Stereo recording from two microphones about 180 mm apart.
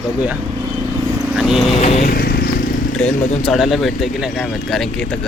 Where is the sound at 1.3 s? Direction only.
Centre (ahead or behind).